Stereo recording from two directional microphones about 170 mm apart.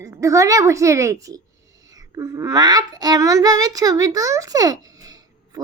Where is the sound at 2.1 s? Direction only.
20° right (ahead or behind).